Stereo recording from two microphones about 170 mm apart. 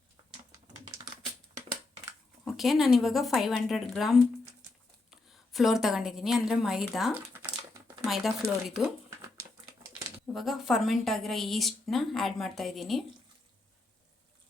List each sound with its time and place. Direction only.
0.2 s a sound: 25° right (ahead or behind)
2.4 s a woman's voice: centre (ahead or behind)
10.3 s a woman's voice: centre (ahead or behind)